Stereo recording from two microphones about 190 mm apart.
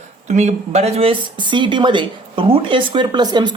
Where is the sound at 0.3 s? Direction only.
35° right (ahead or behind).